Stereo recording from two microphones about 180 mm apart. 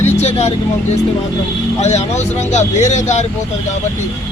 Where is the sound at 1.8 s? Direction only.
40° left (ahead or behind).